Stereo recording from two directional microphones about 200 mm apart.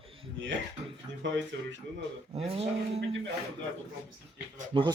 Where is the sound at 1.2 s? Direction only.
65° right (ahead or behind).